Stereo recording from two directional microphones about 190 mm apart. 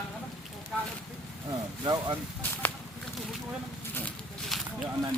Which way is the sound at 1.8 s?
20° right (ahead or behind).